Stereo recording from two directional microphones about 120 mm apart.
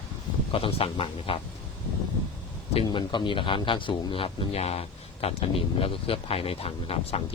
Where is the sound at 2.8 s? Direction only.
40° left (ahead or behind).